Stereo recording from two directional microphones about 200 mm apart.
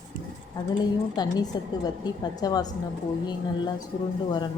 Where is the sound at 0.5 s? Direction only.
20° left (ahead or behind).